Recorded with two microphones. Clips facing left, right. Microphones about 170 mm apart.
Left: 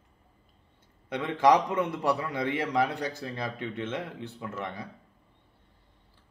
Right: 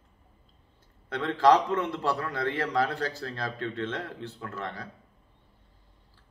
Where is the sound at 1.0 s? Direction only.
20° left (ahead or behind).